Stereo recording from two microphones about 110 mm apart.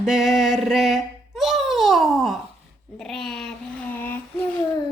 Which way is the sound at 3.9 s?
15° left (ahead or behind).